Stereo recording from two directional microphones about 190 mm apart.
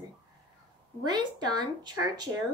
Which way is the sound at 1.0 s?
20° right (ahead or behind).